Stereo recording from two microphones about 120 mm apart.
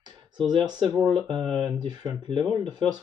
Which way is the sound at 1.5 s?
40° right (ahead or behind).